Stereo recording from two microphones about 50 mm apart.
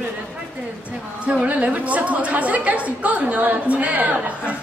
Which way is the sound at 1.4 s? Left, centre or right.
Right.